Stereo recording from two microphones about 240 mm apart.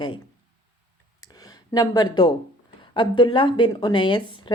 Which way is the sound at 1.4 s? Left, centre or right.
Centre.